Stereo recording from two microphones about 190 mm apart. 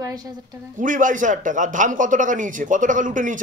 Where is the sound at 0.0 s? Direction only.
20° right (ahead or behind).